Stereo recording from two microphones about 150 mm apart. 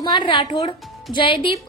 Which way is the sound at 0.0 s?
30° left (ahead or behind).